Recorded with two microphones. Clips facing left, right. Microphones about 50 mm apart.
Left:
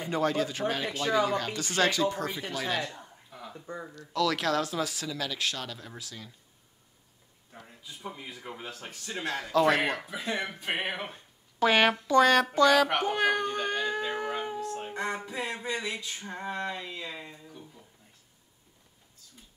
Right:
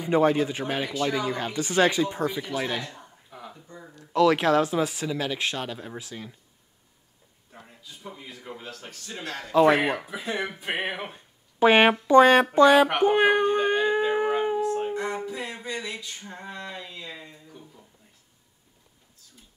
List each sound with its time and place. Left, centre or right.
0.1 s speech: right
3.0 s a sound: centre
3.9 s speech: right
8.2 s a man's voice: centre
9.5 s speech: centre
10.0 s speech: centre
11.6 s speech: right
12.5 s child singing: right
15.0 s music: centre
15.6 s a man's voice: centre
16.2 s a sound: left
16.7 s a man's voice: centre